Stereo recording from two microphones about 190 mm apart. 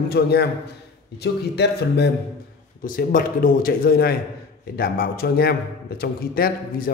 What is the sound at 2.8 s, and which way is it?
Speech, 45° left (ahead or behind).